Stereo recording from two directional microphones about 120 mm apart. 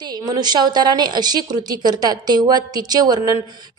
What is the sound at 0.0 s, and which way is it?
A woman's voice, 35° right (ahead or behind).